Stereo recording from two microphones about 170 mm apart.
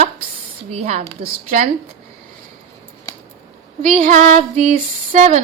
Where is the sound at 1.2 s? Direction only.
55° right (ahead or behind).